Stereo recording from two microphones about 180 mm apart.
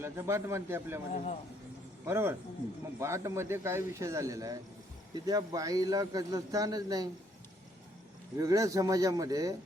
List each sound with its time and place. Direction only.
0.0 s a man's voice: 15° right (ahead or behind)
2.0 s a man's voice: 15° right (ahead or behind)
8.4 s a man's voice: 20° right (ahead or behind)